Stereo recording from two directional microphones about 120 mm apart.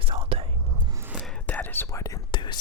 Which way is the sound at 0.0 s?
45° right (ahead or behind).